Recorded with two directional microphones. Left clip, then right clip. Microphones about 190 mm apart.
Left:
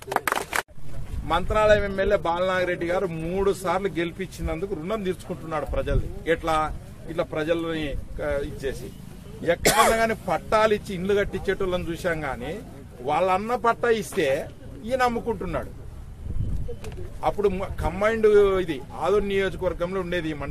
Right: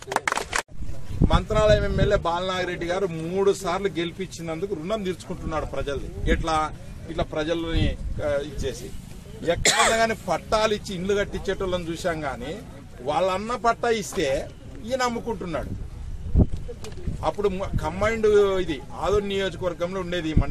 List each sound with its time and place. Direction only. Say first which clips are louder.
0.2 s a sound: even; 25° right (ahead or behind)
1.3 s speech: left 1 dB; 5° left (ahead or behind)
17.2 s speech: left 1 dB; 10° left (ahead or behind)